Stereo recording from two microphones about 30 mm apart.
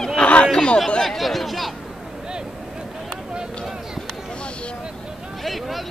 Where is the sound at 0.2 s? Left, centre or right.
Left.